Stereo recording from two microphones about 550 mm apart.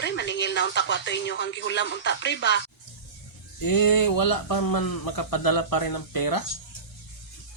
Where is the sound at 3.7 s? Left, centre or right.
Left.